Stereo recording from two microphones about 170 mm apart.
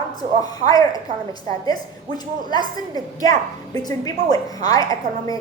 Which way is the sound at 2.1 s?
25° left (ahead or behind).